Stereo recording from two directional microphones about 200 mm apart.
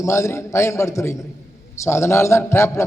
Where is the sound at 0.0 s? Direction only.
15° left (ahead or behind).